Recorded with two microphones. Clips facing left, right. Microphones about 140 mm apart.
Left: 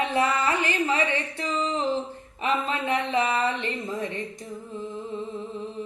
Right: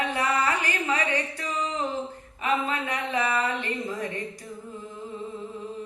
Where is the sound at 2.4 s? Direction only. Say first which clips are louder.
Left 1 dB; 25° left (ahead or behind).